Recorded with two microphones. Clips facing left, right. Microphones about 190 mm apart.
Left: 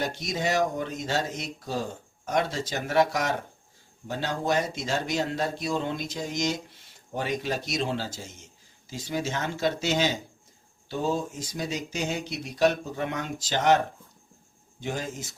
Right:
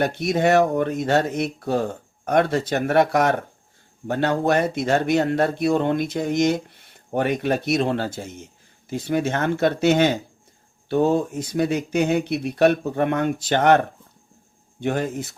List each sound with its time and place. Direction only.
0.0 s speech: 60° right (ahead or behind)